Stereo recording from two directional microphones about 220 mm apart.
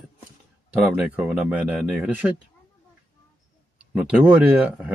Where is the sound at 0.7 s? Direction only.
5° right (ahead or behind).